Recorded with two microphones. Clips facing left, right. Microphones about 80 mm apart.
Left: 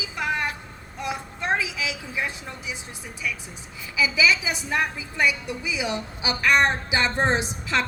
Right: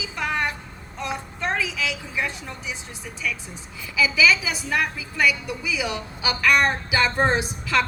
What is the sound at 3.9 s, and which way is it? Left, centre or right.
A woman's voice, left.